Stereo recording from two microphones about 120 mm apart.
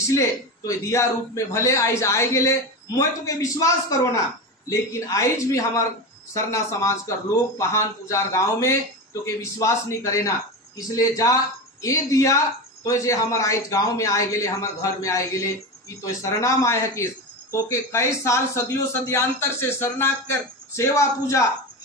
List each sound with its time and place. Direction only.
0.1 s speech: 25° left (ahead or behind)